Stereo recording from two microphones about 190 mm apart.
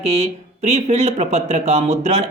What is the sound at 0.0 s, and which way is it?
Speech, 35° right (ahead or behind).